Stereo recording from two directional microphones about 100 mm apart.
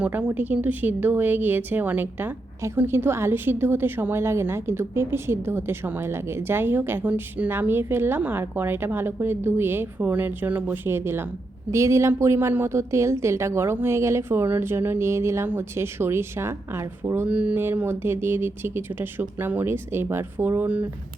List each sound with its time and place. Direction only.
0.0 s a woman's voice: 15° right (ahead or behind)
17.2 s a woman's voice: 15° right (ahead or behind)